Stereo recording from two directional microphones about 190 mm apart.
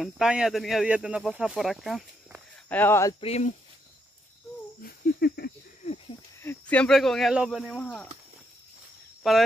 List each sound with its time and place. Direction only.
0.0 s speech: 5° right (ahead or behind)
2.7 s speech: 10° left (ahead or behind)
3.2 s speech: 35° left (ahead or behind)
4.8 s a sound: 55° left (ahead or behind)
6.4 s speech: 10° left (ahead or behind)
9.2 s speech: centre (ahead or behind)